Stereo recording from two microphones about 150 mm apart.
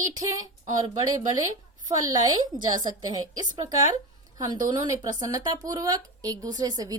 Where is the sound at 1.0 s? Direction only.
25° right (ahead or behind).